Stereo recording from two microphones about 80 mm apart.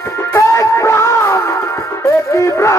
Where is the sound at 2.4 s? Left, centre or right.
Left.